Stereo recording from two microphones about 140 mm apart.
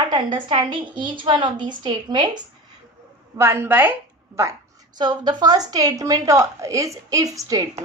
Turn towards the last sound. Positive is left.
turn(degrees=-25)  # may be behind; listen again after turning